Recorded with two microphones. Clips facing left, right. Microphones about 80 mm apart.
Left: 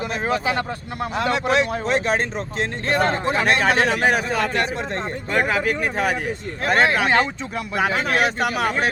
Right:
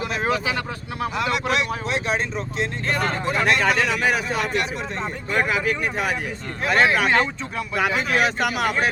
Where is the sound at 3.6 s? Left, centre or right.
Left.